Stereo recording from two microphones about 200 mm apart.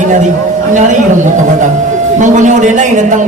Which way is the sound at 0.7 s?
40° right (ahead or behind).